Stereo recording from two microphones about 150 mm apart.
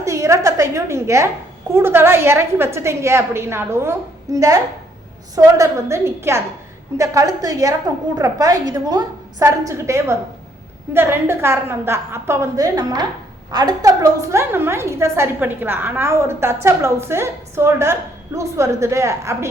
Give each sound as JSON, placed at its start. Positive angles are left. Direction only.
{"t": 0.0, "sound": "a woman's voice", "side_deg": -20}